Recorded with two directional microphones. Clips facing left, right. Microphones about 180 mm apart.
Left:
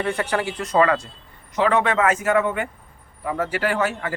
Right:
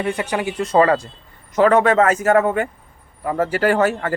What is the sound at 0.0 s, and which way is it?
Speech, 15° right (ahead or behind).